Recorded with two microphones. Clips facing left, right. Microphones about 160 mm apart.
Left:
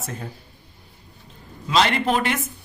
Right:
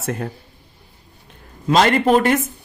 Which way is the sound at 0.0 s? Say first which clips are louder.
Right 8 dB; 65° right (ahead or behind).